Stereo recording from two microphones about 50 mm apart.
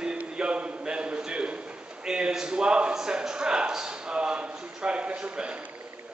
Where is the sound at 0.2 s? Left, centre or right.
Right.